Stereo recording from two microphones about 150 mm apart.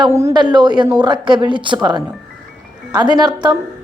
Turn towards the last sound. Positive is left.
turn(degrees=-30)  # may be behind; listen again after turning